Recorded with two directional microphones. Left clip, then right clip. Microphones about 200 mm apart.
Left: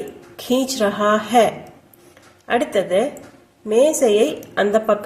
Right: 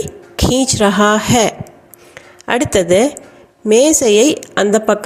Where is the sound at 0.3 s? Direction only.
45° right (ahead or behind).